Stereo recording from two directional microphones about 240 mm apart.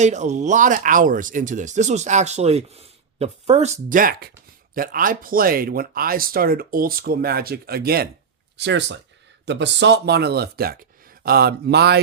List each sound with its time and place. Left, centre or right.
0.0 s speech: right